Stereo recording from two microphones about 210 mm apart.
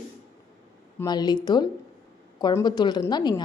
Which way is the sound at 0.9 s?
20° left (ahead or behind).